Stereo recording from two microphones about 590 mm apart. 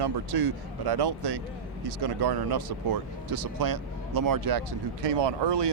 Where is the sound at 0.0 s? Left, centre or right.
Right.